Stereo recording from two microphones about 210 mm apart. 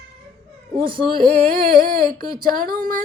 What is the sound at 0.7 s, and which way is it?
Speech, 25° right (ahead or behind).